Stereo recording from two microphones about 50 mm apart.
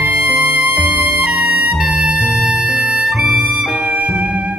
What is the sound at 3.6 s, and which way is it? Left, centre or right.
Music, right.